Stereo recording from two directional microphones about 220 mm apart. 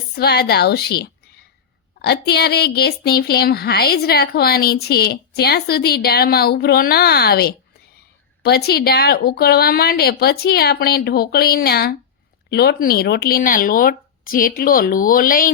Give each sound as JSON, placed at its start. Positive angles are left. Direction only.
{"t": 0.2, "sound": "speech", "side_deg": 45}